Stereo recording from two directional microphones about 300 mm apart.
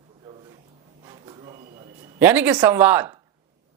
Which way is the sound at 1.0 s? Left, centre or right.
Centre.